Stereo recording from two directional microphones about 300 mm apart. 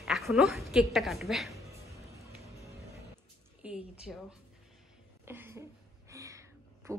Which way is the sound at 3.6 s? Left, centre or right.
Centre.